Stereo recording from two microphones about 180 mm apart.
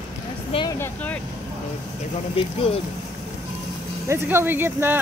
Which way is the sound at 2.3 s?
30° left (ahead or behind).